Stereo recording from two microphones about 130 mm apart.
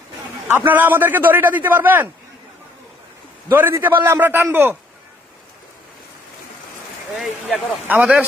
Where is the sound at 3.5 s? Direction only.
15° right (ahead or behind).